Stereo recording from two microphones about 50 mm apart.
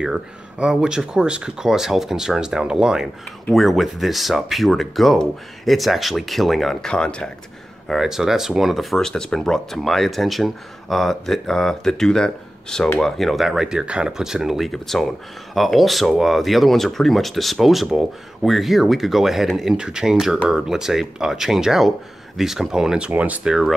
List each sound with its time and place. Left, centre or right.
0.0 s speech: centre
3.5 s speech: centre
7.9 s speech: centre
8.9 s speech: centre
23.0 s speech: right
23.4 s speech: centre